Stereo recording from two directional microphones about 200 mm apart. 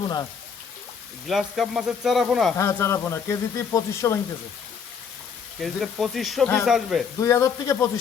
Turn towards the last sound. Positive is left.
turn(degrees=15)  # may be behind; listen again after turning